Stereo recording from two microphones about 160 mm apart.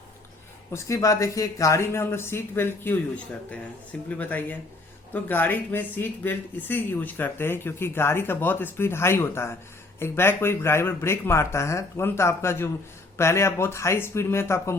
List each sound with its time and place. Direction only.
0.7 s speech: 20° left (ahead or behind)
4.1 s speech: 10° left (ahead or behind)